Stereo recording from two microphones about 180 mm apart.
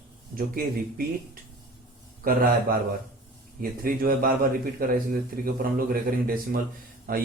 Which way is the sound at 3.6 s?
50° right (ahead or behind).